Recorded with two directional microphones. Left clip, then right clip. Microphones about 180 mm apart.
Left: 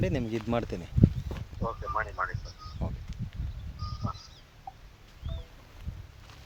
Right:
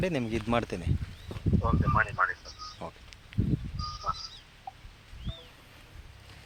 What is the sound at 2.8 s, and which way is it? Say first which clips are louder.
Speech: left 1 dB; 5° right (ahead or behind).